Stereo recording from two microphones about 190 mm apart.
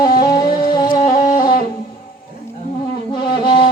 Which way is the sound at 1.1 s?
40° left (ahead or behind).